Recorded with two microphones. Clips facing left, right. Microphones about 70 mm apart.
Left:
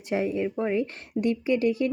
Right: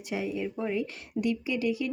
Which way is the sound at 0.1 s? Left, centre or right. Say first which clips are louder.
Left 6 dB; left.